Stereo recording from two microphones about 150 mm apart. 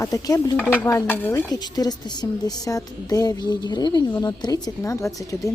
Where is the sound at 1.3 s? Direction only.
25° left (ahead or behind).